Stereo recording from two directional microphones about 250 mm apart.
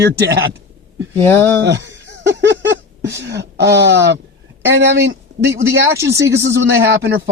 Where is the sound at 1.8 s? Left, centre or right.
Centre.